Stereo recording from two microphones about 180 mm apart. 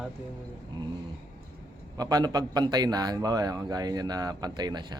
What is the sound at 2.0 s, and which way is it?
Speech, 20° right (ahead or behind).